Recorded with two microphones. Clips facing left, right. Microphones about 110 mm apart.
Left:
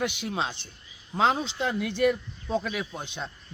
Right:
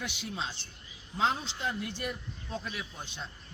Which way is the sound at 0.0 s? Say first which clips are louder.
Left 8 dB; 60° left (ahead or behind).